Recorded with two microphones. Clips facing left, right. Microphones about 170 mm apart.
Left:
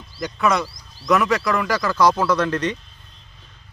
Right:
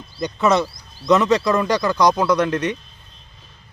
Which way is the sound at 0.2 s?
20° right (ahead or behind).